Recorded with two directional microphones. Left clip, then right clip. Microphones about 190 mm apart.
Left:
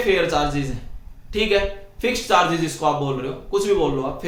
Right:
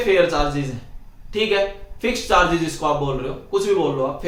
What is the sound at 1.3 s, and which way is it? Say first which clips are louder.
Speech: even; 25° left (ahead or behind).